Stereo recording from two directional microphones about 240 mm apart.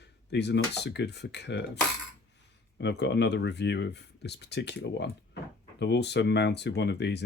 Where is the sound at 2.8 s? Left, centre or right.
Left.